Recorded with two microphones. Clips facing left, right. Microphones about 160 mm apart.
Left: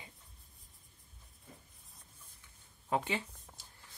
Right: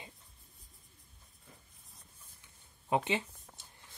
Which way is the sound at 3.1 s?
20° right (ahead or behind).